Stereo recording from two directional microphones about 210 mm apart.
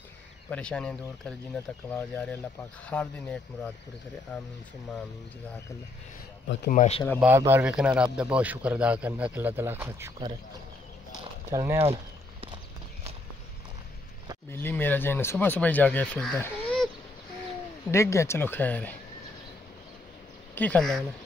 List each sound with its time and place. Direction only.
0.5 s speech: 5° left (ahead or behind)
6.7 s speech: 35° left (ahead or behind)
7.2 s a man's voice: 10° right (ahead or behind)
11.5 s a man's voice: 10° right (ahead or behind)
11.8 s a sound: 25° right (ahead or behind)
14.5 s speech: 10° left (ahead or behind)
17.9 s speech: 15° left (ahead or behind)
20.5 s speech: 5° left (ahead or behind)